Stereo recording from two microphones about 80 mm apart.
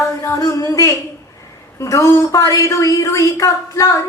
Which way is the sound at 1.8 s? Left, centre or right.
Left.